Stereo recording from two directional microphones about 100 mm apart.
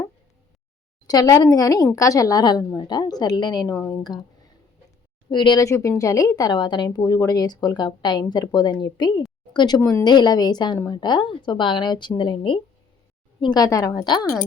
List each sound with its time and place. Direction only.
1.0 s speech: 40° left (ahead or behind)
5.3 s speech: 50° left (ahead or behind)
5.5 s speech: 30° left (ahead or behind); by 12.5 s 55° left (ahead or behind)
13.4 s speech: 40° left (ahead or behind)